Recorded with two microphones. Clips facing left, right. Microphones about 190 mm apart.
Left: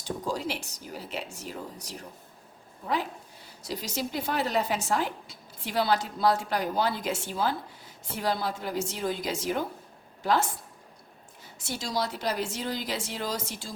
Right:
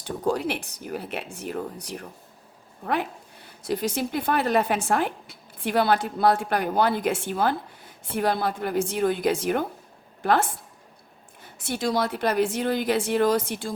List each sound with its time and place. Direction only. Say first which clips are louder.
0.0 s a woman's voice: right 6 dB; 60° right (ahead or behind)